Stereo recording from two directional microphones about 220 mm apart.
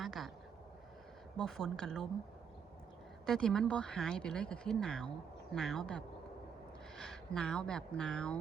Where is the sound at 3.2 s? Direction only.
Centre (ahead or behind).